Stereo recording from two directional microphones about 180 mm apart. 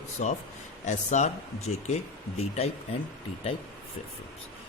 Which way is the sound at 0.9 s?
40° left (ahead or behind).